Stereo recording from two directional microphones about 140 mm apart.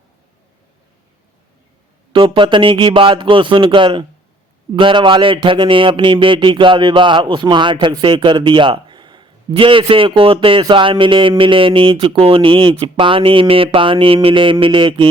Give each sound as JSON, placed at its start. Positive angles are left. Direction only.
{"t": 2.1, "sound": "speech", "side_deg": -35}